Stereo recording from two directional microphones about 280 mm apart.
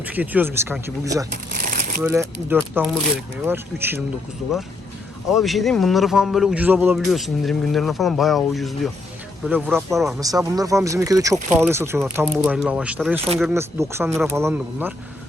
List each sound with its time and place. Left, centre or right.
0.0 s speech: centre
1.5 s a sound: right
2.0 s a man's voice: centre
5.3 s a man's voice: centre
10.2 s a man's voice: centre
14.1 s a man's voice: centre